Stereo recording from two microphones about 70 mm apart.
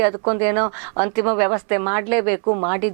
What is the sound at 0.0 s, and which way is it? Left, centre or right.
Speech, right.